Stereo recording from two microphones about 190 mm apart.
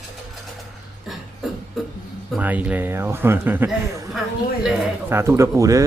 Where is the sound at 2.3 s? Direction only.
10° right (ahead or behind).